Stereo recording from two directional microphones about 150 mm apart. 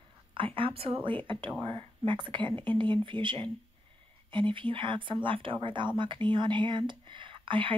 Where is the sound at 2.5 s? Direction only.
15° left (ahead or behind).